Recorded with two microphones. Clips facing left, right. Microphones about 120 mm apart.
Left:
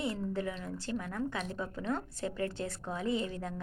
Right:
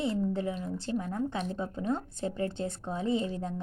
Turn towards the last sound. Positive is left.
turn(degrees=-25)  # may be behind; listen again after turning